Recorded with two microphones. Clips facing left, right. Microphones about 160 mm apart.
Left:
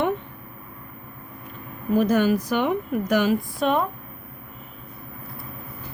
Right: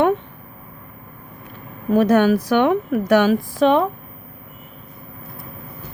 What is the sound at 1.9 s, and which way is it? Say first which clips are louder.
A woman's voice: right 5 dB; 65° right (ahead or behind).